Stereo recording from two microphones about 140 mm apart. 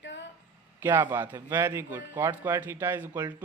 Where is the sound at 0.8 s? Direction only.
15° right (ahead or behind).